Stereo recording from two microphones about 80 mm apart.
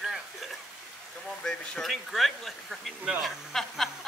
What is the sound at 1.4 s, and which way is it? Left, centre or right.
Speech, centre.